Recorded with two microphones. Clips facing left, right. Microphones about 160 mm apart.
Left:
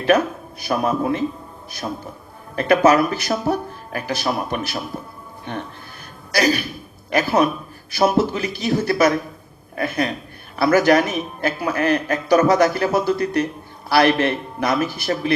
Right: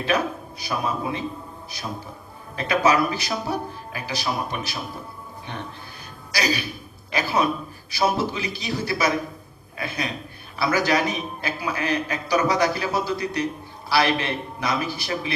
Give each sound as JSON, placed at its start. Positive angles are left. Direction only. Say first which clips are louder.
{"t": 0.6, "sound": "a man's voice", "louder": "left 6 dB", "side_deg": 55}
{"t": 2.6, "sound": "a man's voice", "louder": "left 6 dB", "side_deg": 55}
{"t": 6.3, "sound": "a man's voice", "louder": "left 6 dB", "side_deg": 55}